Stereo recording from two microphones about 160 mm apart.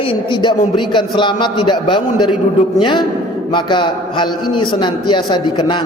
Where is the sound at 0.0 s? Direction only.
30° left (ahead or behind).